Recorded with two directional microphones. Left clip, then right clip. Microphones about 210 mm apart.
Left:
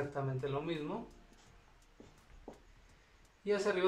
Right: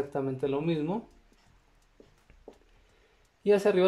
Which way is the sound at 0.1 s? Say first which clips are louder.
Right 8 dB; 45° right (ahead or behind).